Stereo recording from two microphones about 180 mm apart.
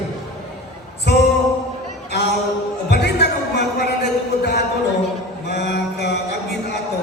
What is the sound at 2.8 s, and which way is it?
Music, 70° left (ahead or behind).